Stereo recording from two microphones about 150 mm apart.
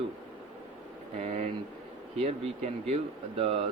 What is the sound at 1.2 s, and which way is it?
A man's voice, 50° right (ahead or behind).